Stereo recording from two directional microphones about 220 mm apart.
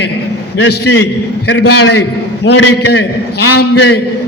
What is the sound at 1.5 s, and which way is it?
A man's voice, 50° left (ahead or behind).